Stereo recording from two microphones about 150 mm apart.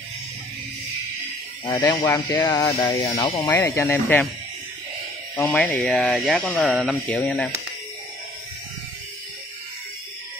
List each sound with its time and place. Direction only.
1.7 s speech: 30° left (ahead or behind)
5.3 s speech: 10° left (ahead or behind)